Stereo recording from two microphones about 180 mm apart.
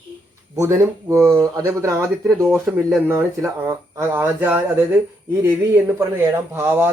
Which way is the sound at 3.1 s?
15° right (ahead or behind).